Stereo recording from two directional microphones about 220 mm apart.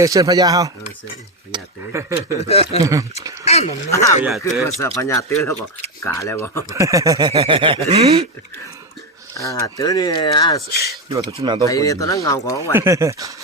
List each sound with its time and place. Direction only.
0.0 s speech: 15° right (ahead or behind)
2.5 s speech: 30° left (ahead or behind)
2.8 s speech: 15° right (ahead or behind)
3.4 s a sound: 30° left (ahead or behind)
3.8 s speech: 15° left (ahead or behind)
4.2 s speech: centre (ahead or behind)
4.6 s speech: 10° left (ahead or behind)
6.7 s speech: 15° right (ahead or behind)
9.4 s speech: 15° left (ahead or behind)
11.1 s speech: 15° right (ahead or behind)
11.6 s speech: 15° left (ahead or behind)
12.7 s speech: 10° right (ahead or behind)